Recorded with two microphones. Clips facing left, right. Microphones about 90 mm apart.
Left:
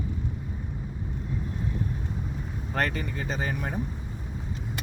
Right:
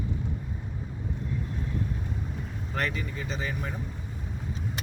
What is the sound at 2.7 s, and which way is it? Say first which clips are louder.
Speech: left 3 dB; 45° left (ahead or behind).